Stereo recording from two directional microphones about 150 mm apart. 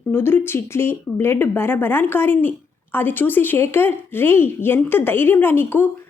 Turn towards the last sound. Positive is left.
turn(degrees=15)  # may be behind; listen again after turning